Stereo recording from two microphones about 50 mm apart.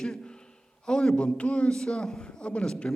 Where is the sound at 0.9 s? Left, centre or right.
Centre.